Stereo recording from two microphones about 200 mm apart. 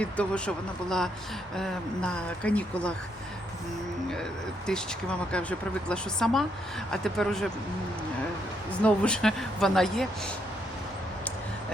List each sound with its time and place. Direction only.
0.0 s speech: 5° left (ahead or behind)
4.1 s speech: 5° left (ahead or behind)
8.8 s speech: 5° left (ahead or behind)